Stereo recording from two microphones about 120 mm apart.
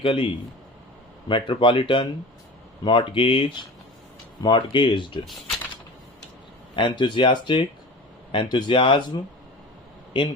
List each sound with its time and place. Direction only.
0.0 s speech: 45° left (ahead or behind)
1.3 s speech: 45° left (ahead or behind)
6.7 s speech: 40° left (ahead or behind)
10.1 s speech: 40° left (ahead or behind)